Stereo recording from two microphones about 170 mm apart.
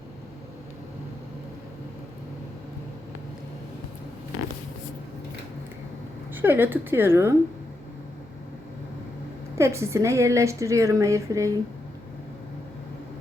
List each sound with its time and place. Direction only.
6.3 s a woman's voice: 10° right (ahead or behind)
9.6 s a woman's voice: 15° right (ahead or behind)